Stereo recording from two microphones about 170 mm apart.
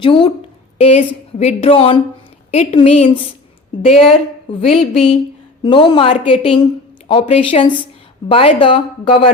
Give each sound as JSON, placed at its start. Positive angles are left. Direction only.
{"t": 0.0, "sound": "a woman's voice", "side_deg": 30}
{"t": 4.6, "sound": "a woman's voice", "side_deg": 35}